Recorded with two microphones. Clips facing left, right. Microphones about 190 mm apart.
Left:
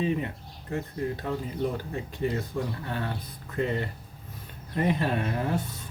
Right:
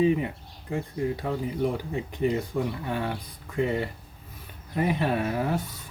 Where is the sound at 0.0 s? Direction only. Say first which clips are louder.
Right 5 dB; 15° right (ahead or behind).